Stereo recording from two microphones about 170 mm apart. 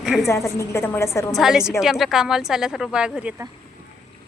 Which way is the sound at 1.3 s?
Centre (ahead or behind).